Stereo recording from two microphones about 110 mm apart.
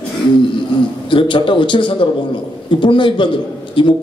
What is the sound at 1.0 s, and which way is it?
A man's voice, 50° left (ahead or behind).